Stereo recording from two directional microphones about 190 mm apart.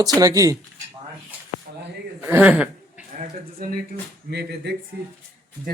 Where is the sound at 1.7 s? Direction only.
50° right (ahead or behind).